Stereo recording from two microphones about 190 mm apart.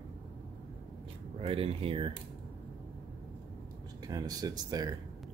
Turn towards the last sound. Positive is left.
turn(degrees=-20)  # may be behind; listen again after turning